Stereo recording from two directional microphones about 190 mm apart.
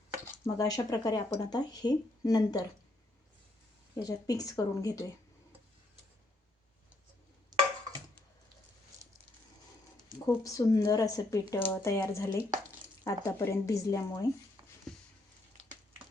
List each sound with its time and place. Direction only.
0.3 s speech: 15° left (ahead or behind)
3.9 s speech: 20° left (ahead or behind)
10.2 s a woman's voice: 20° left (ahead or behind)